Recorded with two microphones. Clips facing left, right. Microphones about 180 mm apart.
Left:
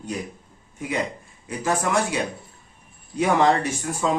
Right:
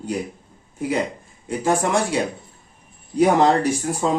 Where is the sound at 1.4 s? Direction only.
30° right (ahead or behind).